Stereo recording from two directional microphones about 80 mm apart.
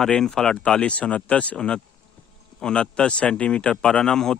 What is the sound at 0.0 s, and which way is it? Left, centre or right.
Speech, centre.